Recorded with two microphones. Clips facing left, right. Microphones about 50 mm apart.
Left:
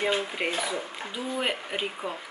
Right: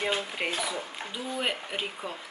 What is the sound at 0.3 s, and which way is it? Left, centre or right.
Speech, centre.